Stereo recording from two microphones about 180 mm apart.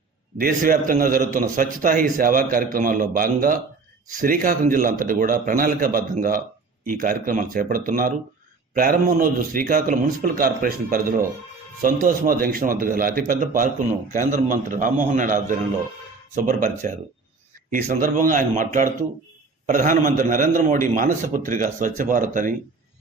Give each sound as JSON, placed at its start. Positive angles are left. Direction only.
{"t": 0.3, "sound": "a man's voice", "side_deg": -50}